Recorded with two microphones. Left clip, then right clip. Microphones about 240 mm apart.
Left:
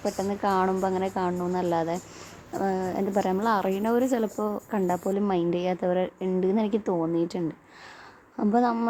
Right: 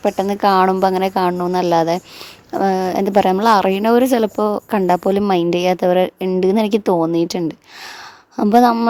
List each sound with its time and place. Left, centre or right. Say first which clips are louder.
0.0 s a woman's voice: right 11 dB; right